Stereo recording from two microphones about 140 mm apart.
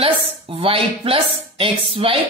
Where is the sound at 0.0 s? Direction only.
40° right (ahead or behind).